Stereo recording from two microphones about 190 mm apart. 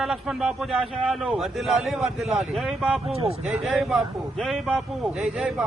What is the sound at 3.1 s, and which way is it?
Speech, 30° right (ahead or behind).